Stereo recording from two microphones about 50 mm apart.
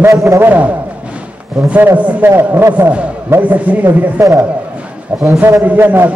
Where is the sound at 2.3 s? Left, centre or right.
Right.